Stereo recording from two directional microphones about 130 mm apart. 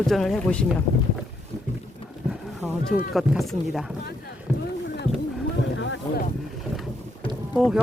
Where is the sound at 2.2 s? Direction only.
5° right (ahead or behind).